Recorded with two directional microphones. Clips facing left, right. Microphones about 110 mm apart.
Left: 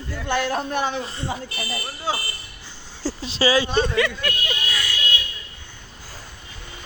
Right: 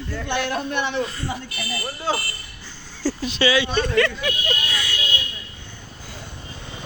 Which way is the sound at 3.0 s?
30° left (ahead or behind).